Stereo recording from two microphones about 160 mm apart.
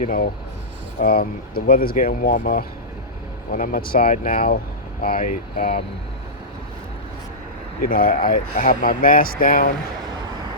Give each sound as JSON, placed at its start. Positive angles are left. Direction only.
{"t": 0.0, "sound": "speech", "side_deg": 60}
{"t": 7.8, "sound": "speech", "side_deg": 60}